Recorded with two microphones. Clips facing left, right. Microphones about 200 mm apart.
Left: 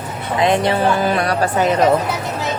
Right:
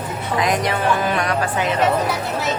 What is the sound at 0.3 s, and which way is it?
Speech, 30° left (ahead or behind).